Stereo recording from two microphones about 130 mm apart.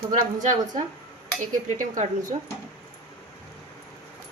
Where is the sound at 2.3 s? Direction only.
50° right (ahead or behind).